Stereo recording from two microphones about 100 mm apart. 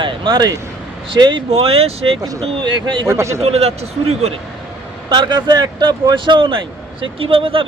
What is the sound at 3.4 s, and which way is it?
Speech, 90° right.